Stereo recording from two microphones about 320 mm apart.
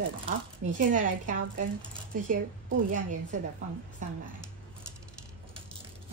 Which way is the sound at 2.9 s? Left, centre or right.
Right.